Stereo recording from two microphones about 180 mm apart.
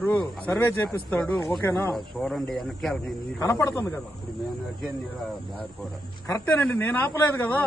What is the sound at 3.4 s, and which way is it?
Speech, 20° left (ahead or behind).